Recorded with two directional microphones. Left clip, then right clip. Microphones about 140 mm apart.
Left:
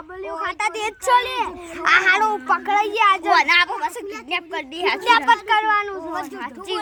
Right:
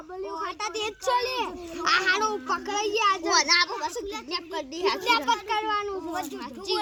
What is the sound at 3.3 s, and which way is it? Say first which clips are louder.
A woman's voice: left 6 dB; 40° left (ahead or behind).